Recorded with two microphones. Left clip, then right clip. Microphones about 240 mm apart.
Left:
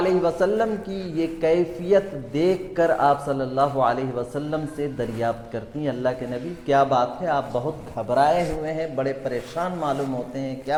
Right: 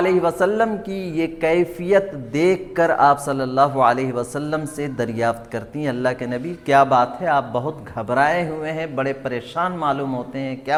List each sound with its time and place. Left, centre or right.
0.0 s a man's voice: right